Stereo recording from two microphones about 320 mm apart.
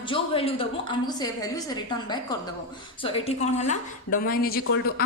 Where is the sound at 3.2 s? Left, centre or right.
Left.